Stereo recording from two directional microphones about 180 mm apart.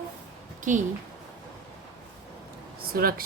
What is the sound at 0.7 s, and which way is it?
Speech, 45° right (ahead or behind).